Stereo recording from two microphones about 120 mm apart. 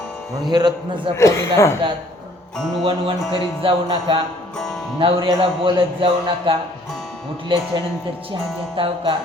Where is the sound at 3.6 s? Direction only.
50° right (ahead or behind).